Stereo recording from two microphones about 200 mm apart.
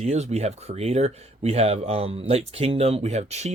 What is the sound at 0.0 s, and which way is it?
Speech, 35° right (ahead or behind).